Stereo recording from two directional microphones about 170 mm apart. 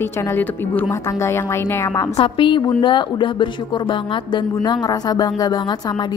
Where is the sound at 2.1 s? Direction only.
30° left (ahead or behind).